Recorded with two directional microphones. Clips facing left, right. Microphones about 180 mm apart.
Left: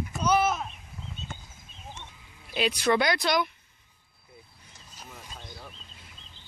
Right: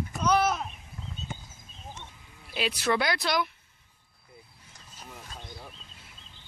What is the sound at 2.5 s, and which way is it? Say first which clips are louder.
Speech: left 3 dB; 5° right (ahead or behind).